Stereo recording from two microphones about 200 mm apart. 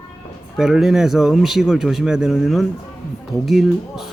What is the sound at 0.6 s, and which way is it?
Speech, 5° right (ahead or behind).